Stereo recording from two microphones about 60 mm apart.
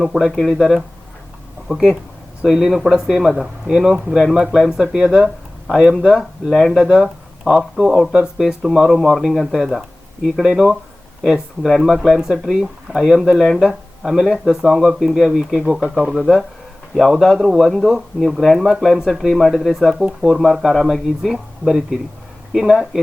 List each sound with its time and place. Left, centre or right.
0.0 s speech: centre
5.0 s speech: centre
5.6 s speech: centre
6.7 s speech: centre